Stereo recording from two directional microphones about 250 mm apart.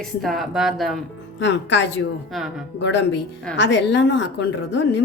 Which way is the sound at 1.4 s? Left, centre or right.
Left.